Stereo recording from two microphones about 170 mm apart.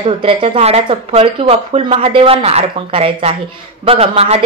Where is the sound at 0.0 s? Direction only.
35° right (ahead or behind).